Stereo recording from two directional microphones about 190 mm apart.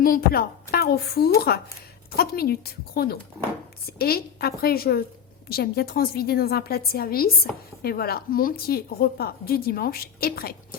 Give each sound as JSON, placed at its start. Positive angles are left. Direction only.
{"t": 0.0, "sound": "a woman's voice", "side_deg": 50}